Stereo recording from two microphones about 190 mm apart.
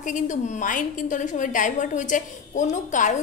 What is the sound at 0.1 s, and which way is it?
A woman's voice, 40° left (ahead or behind).